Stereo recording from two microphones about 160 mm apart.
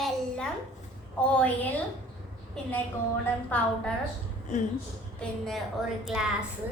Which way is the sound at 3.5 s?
10° left (ahead or behind).